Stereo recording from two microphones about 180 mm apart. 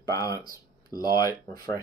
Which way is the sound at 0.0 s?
20° left (ahead or behind).